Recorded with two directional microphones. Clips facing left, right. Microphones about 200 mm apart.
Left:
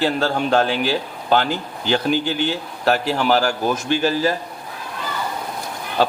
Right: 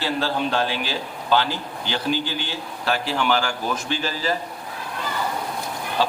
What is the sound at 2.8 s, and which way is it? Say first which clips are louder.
A man's voice: left 5 dB; 45° left (ahead or behind).